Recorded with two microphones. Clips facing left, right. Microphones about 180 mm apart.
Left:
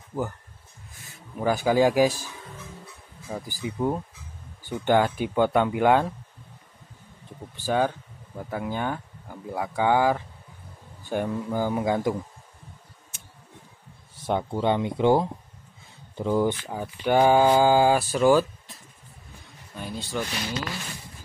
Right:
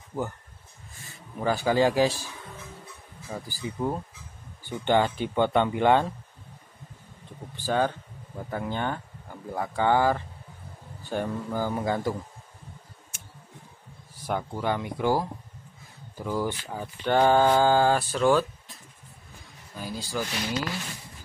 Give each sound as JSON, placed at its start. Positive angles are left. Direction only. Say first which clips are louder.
{"t": 1.4, "sound": "speech", "louder": "left 2 dB", "side_deg": 10}
{"t": 3.3, "sound": "speech", "louder": "left 2 dB", "side_deg": 10}
{"t": 7.6, "sound": "speech", "louder": "left 1 dB", "side_deg": 10}
{"t": 14.2, "sound": "speech", "louder": "left 4 dB", "side_deg": 25}
{"t": 16.7, "sound": "speech", "louder": "even", "side_deg": 10}